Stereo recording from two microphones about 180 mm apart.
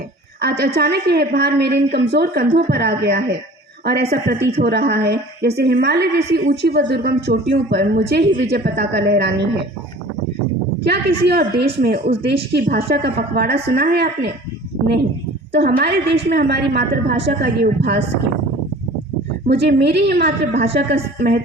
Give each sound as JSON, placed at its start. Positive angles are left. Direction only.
{"t": 0.4, "sound": "a woman's voice", "side_deg": -65}
{"t": 10.8, "sound": "a woman's voice", "side_deg": -65}
{"t": 15.5, "sound": "a woman's voice", "side_deg": -65}
{"t": 19.5, "sound": "a woman's voice", "side_deg": -70}